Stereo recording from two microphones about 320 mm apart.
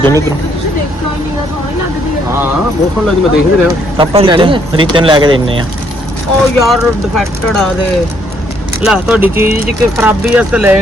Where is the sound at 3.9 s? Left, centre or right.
Centre.